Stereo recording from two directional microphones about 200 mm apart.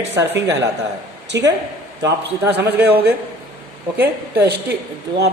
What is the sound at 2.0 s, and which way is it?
Speech, 15° right (ahead or behind).